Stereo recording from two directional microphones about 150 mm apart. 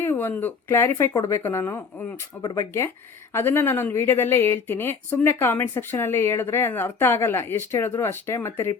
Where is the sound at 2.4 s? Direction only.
25° left (ahead or behind).